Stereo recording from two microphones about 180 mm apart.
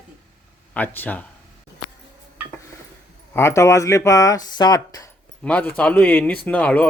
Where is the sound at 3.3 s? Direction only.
15° left (ahead or behind).